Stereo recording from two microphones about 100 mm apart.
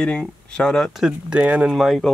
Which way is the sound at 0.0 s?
10° left (ahead or behind).